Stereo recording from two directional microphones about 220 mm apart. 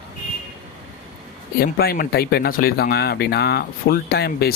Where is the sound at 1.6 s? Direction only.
45° left (ahead or behind).